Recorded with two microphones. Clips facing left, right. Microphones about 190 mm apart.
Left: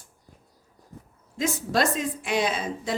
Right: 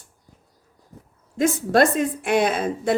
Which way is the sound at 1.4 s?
55° right (ahead or behind).